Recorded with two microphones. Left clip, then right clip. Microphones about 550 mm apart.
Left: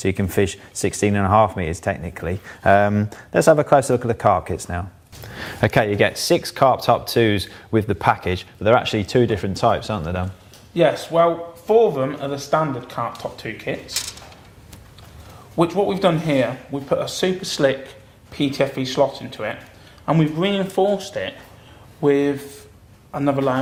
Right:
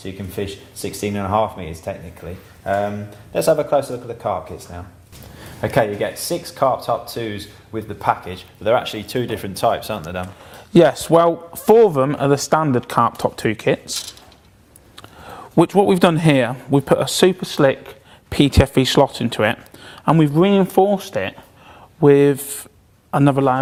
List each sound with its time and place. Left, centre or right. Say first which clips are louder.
0.0 s speech: left 7 dB; left
3.3 s speech: left 2 dB; left
5.5 s speech: left 1 dB; left
10.8 s speech: right 4 dB; right
15.5 s speech: right 5 dB; right
17.4 s speech: right 3 dB; right
18.3 s speech: right 4 dB; right
20.4 s speech: right 5 dB; right
22.0 s speech: right 6 dB; right